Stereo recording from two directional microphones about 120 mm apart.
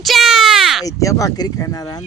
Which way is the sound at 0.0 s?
Centre (ahead or behind).